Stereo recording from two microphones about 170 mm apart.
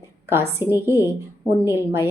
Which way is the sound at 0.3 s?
15° right (ahead or behind).